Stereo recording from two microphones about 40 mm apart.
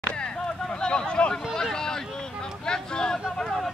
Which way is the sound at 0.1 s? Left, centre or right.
Left.